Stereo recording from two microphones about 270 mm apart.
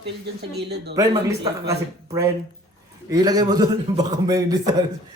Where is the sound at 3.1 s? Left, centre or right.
Centre.